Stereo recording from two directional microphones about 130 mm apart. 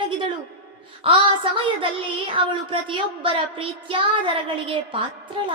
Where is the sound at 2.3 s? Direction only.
40° right (ahead or behind).